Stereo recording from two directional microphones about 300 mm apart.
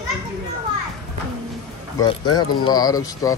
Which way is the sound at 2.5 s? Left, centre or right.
Centre.